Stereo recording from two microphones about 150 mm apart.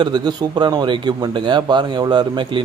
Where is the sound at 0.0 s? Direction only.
30° right (ahead or behind).